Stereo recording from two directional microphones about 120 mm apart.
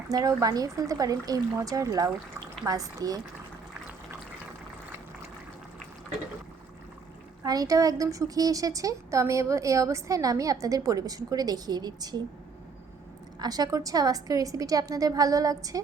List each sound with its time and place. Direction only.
0.1 s speech: 30° right (ahead or behind)
7.4 s speech: 30° right (ahead or behind)
13.4 s speech: 30° right (ahead or behind)